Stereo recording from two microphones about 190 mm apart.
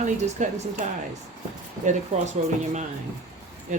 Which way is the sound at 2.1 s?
35° right (ahead or behind).